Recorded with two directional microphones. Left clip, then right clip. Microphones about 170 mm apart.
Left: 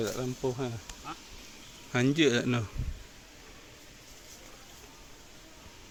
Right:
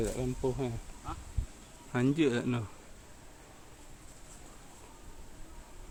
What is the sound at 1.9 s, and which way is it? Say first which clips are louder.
Speech: left 3 dB; centre (ahead or behind).